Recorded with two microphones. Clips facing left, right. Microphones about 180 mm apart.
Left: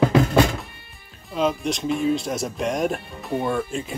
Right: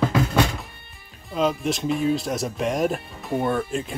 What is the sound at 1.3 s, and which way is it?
Speech, centre (ahead or behind).